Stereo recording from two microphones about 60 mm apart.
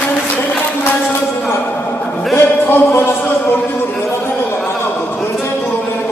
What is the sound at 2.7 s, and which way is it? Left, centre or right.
Music, left.